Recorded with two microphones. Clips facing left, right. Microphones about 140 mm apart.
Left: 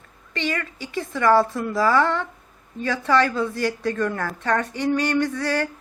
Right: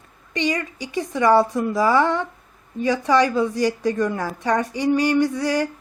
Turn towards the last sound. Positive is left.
turn(degrees=-15)  # may be behind; listen again after turning